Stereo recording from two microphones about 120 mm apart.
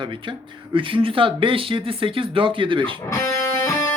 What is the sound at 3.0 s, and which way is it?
Speech, 25° left (ahead or behind).